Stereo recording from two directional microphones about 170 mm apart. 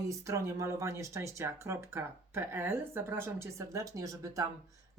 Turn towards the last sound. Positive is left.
turn(degrees=-20)  # may be behind; listen again after turning